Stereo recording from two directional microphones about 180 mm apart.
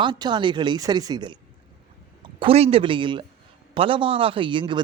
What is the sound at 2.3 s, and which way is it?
A man's voice, 35° right (ahead or behind).